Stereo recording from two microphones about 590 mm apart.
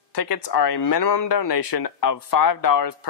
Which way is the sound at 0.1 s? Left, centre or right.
Left.